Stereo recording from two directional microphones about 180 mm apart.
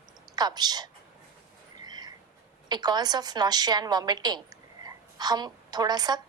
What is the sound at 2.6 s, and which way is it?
A woman's voice, 25° right (ahead or behind).